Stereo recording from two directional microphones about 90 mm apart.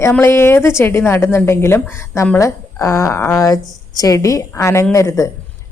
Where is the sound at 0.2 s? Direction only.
25° left (ahead or behind).